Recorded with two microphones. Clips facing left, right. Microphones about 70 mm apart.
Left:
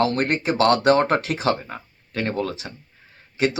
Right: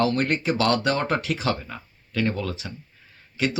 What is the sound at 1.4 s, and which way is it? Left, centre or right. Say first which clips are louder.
Speech: left 4 dB; left.